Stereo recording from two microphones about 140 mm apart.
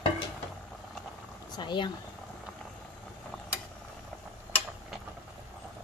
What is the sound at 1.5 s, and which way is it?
Speech, 35° left (ahead or behind).